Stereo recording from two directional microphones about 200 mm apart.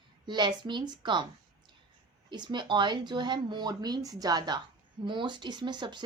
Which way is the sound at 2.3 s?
25° right (ahead or behind).